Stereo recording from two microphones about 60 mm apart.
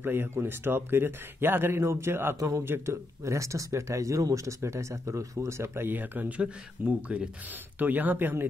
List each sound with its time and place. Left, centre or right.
0.0 s speech: right
2.3 s speech: right
2.6 s speech: right
3.3 s speech: right
4.6 s speech: right
7.8 s speech: right